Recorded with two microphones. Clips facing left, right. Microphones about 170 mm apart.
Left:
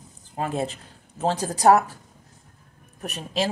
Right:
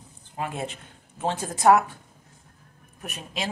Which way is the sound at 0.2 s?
35° left (ahead or behind).